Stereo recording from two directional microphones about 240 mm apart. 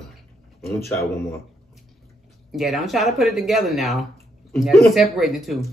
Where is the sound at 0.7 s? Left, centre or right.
Centre.